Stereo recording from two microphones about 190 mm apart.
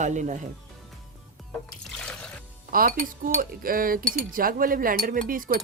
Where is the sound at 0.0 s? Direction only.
40° right (ahead or behind).